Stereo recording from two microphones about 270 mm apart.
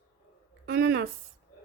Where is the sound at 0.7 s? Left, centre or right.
Right.